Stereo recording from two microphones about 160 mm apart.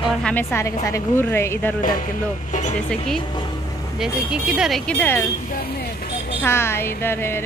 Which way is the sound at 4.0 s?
5° right (ahead or behind).